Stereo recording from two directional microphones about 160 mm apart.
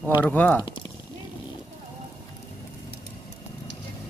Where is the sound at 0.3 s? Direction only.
10° left (ahead or behind).